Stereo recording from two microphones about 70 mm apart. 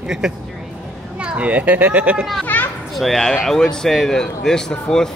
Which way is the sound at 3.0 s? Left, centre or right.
Centre.